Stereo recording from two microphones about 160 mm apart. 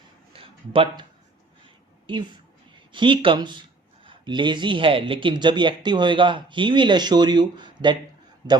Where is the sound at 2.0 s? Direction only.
30° right (ahead or behind).